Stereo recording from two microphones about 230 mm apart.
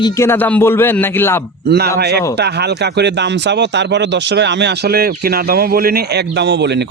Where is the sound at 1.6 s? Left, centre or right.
Right.